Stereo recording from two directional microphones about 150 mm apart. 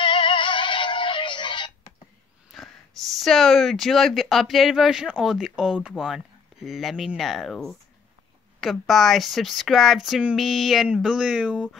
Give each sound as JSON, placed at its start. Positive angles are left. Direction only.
{"t": 0.0, "sound": "synthetic singing", "side_deg": 35}
{"t": 2.5, "sound": "speech", "side_deg": 0}